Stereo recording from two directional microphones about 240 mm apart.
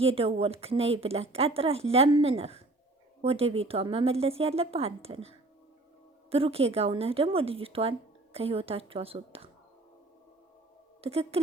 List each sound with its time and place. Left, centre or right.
0.0 s speech: right
6.3 s speech: right
11.0 s speech: right